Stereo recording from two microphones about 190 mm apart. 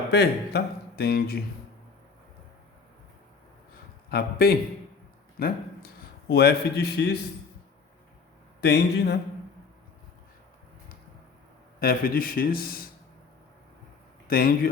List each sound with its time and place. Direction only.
0.1 s speech: 60° left (ahead or behind)
4.1 s a man's voice: 55° left (ahead or behind)
8.6 s speech: 60° left (ahead or behind)
11.8 s a man's voice: 50° left (ahead or behind)
14.3 s a man's voice: 50° left (ahead or behind)